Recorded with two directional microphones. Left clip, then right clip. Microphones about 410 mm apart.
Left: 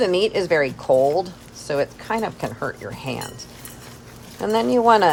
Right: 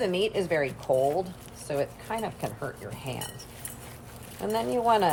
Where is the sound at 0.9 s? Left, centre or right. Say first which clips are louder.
Left 8 dB; left.